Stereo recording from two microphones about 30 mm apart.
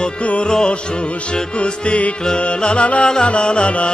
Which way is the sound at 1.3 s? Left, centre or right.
Left.